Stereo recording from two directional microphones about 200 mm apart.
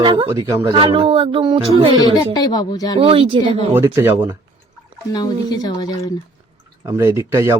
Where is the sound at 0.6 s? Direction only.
25° right (ahead or behind).